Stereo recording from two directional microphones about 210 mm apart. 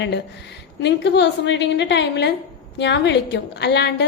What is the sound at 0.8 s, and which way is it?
A woman's voice, 55° left (ahead or behind).